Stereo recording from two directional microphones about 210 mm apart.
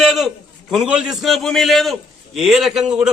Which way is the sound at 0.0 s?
Centre (ahead or behind).